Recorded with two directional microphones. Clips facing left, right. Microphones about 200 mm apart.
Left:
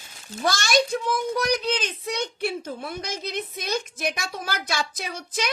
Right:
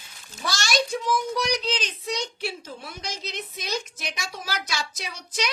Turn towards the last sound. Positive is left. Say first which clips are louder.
# left 2 dB
turn(degrees=55)  # may be behind; listen again after turning